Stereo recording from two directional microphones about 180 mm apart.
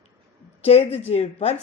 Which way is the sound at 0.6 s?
35° left (ahead or behind).